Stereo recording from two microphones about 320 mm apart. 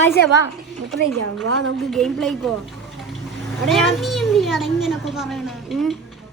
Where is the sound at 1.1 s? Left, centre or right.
Right.